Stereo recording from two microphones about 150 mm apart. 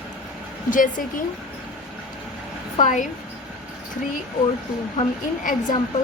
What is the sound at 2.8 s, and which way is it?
Speech, 55° left (ahead or behind).